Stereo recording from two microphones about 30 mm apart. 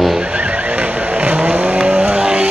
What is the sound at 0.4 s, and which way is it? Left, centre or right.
Vehicle, right.